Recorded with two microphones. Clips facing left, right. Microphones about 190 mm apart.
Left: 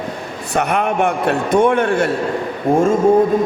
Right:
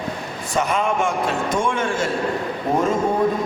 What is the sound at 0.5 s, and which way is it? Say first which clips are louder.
A man's voice: left 3 dB; 65° left (ahead or behind).